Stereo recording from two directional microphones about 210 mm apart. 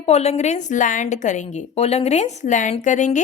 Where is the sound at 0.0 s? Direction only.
30° left (ahead or behind).